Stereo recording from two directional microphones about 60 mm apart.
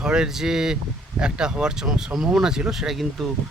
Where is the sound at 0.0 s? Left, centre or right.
Centre.